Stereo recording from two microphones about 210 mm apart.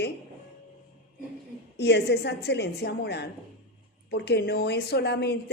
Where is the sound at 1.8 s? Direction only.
50° left (ahead or behind).